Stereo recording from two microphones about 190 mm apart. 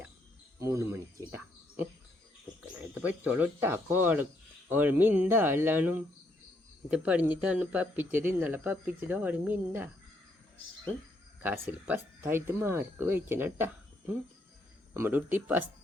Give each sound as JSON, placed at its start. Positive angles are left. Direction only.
{"t": 0.6, "sound": "speech", "side_deg": -15}
{"t": 3.2, "sound": "speech", "side_deg": -10}
{"t": 11.4, "sound": "speech", "side_deg": -10}
{"t": 14.9, "sound": "speech", "side_deg": -10}